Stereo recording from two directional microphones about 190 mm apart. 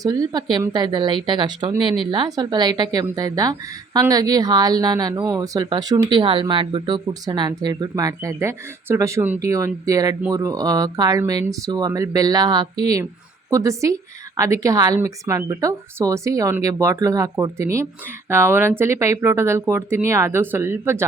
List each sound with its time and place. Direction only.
0.0 s a woman's voice: 20° right (ahead or behind)